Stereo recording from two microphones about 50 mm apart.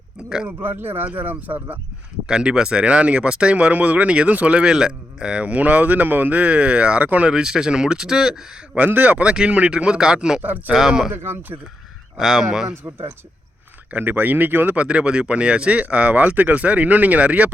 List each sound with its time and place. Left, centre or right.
0.4 s a man's voice: right
2.4 s speech: centre
4.6 s speech: centre
7.3 s speech: centre
8.7 s a man's voice: right
9.3 s speech: right
11.1 s speech: right
12.1 s speech: centre
12.7 s speech: right
13.9 s speech: right
14.8 s speech: right